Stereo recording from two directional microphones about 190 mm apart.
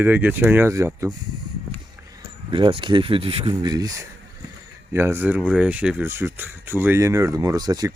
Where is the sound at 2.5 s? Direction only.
25° right (ahead or behind).